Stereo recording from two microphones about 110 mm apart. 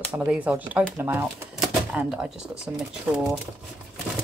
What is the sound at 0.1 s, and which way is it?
Speech, 25° right (ahead or behind).